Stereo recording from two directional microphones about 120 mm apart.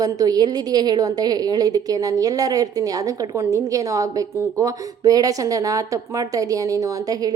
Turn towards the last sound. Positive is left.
turn(degrees=-30)  # may be behind; listen again after turning